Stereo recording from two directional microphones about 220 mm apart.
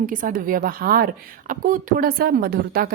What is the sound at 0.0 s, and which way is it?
A woman's voice, 40° right (ahead or behind).